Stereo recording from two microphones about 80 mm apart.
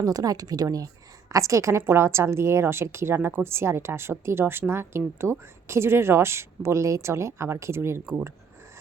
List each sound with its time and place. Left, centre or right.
0.0 s a woman's voice: right